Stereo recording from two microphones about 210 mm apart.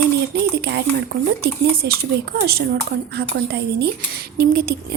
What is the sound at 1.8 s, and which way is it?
A woman's voice, 50° right (ahead or behind).